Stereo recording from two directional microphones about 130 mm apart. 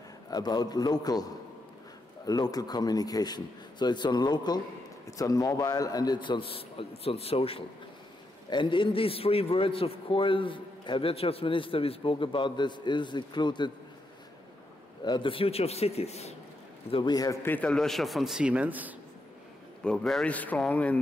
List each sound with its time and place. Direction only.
0.3 s a man's voice: 30° left (ahead or behind)
2.2 s a man's voice: 30° left (ahead or behind)
15.0 s a man's voice: 40° left (ahead or behind); by 16.3 s 55° left (ahead or behind)
16.9 s a man's voice: 35° left (ahead or behind)
17.4 s a man's voice: 15° left (ahead or behind)
17.6 s a man's voice: 5° left (ahead or behind)
19.8 s a man's voice: 5° left (ahead or behind)